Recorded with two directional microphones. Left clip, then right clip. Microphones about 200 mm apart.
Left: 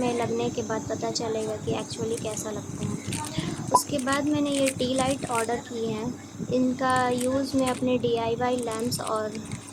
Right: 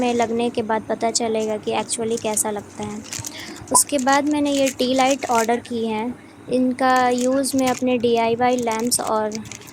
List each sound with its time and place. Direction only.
0.0 s speech: 40° right (ahead or behind)
3.9 s speech: 40° right (ahead or behind)